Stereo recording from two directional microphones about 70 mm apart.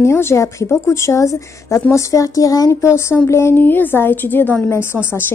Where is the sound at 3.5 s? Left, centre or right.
Left.